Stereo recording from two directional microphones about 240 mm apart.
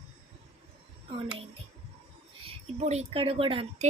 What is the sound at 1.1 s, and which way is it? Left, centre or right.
Speech, right.